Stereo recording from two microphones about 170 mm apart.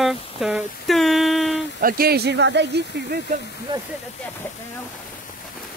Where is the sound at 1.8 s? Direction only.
60° right (ahead or behind); by 2.7 s 90° right.